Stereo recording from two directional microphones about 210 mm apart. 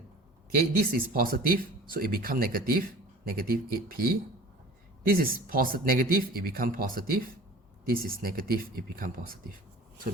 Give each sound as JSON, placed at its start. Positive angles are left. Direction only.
{"t": 0.8, "sound": "speech", "side_deg": -45}